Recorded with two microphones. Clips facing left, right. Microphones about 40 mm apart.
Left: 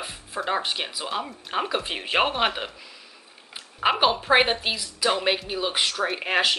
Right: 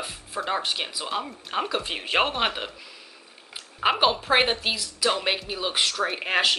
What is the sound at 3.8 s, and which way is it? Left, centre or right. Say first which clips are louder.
Speech: left 1 dB; centre.